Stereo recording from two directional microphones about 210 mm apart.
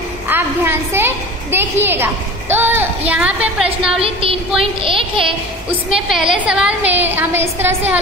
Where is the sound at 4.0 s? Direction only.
25° right (ahead or behind).